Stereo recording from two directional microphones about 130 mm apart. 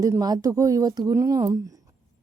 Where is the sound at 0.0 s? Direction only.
25° right (ahead or behind).